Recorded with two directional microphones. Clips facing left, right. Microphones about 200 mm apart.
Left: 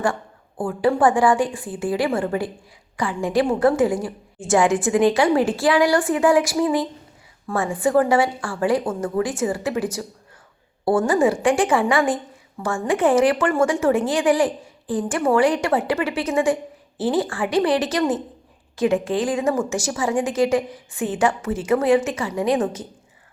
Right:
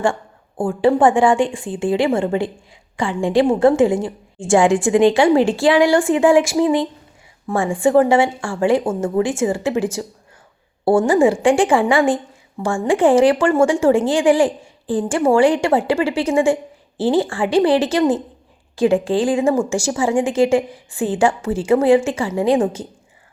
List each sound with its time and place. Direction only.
0.0 s a woman's voice: 25° right (ahead or behind)